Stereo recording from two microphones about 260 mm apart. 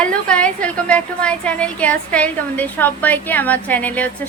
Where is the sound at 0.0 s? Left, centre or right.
Centre.